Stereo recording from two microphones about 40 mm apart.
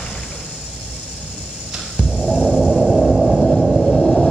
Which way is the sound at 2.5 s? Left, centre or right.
Right.